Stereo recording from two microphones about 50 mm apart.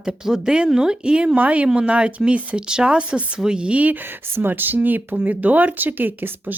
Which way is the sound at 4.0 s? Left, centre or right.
Right.